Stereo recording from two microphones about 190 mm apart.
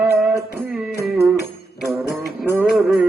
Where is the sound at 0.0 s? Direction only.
10° right (ahead or behind).